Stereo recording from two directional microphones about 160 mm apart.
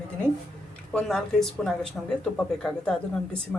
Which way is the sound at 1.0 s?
5° left (ahead or behind).